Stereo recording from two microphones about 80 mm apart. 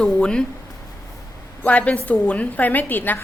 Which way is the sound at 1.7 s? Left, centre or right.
Centre.